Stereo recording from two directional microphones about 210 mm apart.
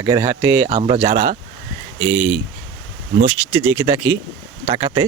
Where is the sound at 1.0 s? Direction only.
15° right (ahead or behind).